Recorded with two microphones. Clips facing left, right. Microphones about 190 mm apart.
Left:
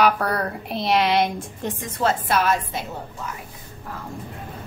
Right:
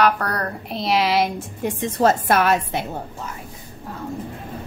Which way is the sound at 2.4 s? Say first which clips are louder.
Right 3 dB; 65° right (ahead or behind).